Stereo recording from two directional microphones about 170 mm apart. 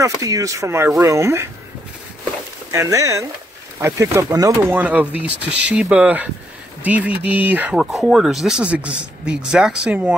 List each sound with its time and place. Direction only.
0.0 s speech: 20° right (ahead or behind)
2.7 s speech: 15° right (ahead or behind)